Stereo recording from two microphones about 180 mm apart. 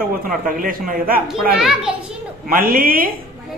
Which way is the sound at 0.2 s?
50° right (ahead or behind).